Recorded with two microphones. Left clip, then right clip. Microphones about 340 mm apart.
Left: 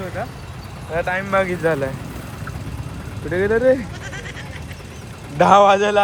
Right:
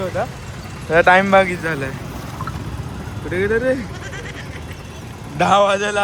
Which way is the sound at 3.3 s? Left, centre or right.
Centre.